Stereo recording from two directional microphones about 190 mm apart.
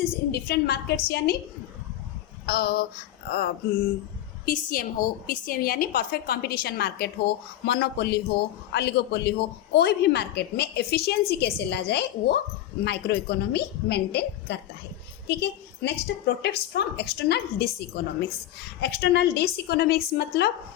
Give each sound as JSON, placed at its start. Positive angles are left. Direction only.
{"t": 0.3, "sound": "a woman's voice", "side_deg": 55}
{"t": 2.5, "sound": "a woman's voice", "side_deg": 55}
{"t": 4.4, "sound": "a woman's voice", "side_deg": 45}